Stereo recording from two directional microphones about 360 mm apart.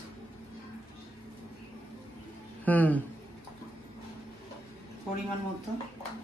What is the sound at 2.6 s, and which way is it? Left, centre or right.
Speech, centre.